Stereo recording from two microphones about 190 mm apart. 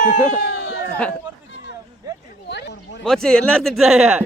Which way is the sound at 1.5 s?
70° left (ahead or behind).